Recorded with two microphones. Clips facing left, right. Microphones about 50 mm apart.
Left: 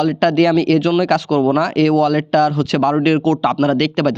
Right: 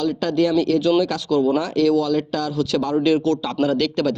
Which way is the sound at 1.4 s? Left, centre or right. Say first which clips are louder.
Left 1 dB; left.